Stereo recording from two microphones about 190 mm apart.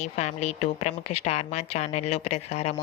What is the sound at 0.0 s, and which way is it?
Speech, 35° left (ahead or behind).